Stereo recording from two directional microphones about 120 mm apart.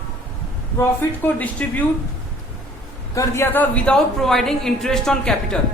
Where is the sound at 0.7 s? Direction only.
15° left (ahead or behind).